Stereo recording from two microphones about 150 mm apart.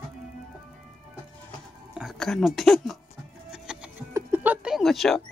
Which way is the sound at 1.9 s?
Centre (ahead or behind).